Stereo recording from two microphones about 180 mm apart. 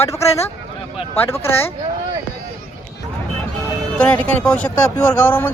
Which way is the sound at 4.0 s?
5° left (ahead or behind).